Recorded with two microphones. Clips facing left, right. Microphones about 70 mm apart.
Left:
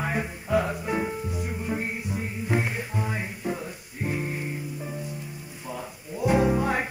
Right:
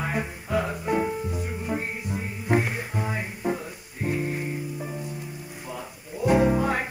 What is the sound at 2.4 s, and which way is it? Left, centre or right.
Music, right.